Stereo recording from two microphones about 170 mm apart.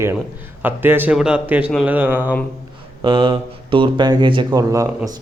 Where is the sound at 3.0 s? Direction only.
30° right (ahead or behind).